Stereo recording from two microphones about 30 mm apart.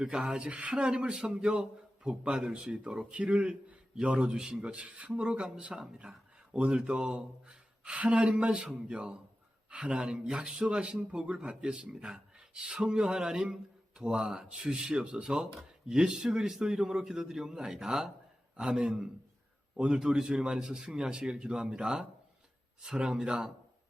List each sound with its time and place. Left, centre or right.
0.0 s a man's voice: right
4.4 s a man's voice: right
4.6 s speech: right
6.0 s a sound: right
6.6 s a man's voice: right
7.1 s speech: right
7.9 s a man's voice: right; by 18.1 s centre
18.6 s a man's voice: right